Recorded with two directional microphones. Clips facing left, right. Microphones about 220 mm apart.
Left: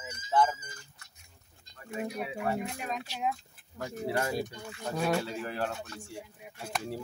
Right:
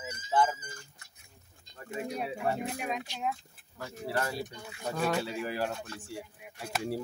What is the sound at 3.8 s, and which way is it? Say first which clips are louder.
Speech: left 2 dB; 20° left (ahead or behind).